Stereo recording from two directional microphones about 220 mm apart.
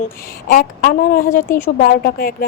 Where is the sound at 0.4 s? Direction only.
40° left (ahead or behind).